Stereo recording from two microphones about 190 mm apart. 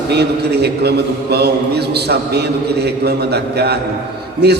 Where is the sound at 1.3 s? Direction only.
60° right (ahead or behind).